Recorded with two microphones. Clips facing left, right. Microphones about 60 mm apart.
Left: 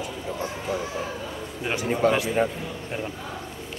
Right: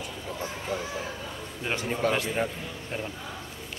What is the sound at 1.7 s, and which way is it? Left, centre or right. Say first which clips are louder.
Speech: left 5 dB; centre.